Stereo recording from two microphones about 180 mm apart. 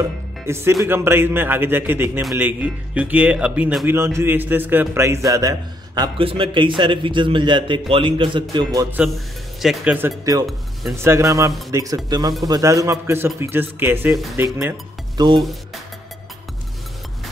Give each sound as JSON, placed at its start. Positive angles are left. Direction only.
{"t": 0.5, "sound": "a man's voice", "side_deg": -15}
{"t": 8.9, "sound": "a man's voice", "side_deg": -5}
{"t": 15.1, "sound": "a man's voice", "side_deg": -25}